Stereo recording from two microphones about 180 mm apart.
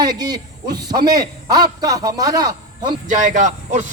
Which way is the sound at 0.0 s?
20° right (ahead or behind).